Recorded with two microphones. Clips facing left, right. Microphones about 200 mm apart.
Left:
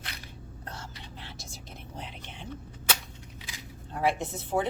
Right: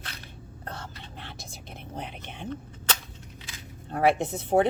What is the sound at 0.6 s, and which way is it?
Whispering, 60° right (ahead or behind).